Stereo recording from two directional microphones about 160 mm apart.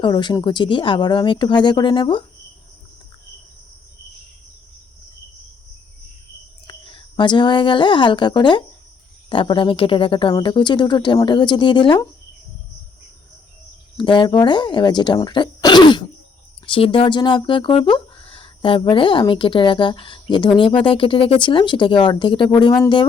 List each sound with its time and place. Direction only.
0.0 s speech: 30° left (ahead or behind)
6.7 s a woman's voice: 30° left (ahead or behind)
13.9 s speech: 30° left (ahead or behind)